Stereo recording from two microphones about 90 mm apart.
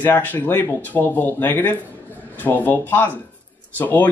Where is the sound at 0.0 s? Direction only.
20° left (ahead or behind).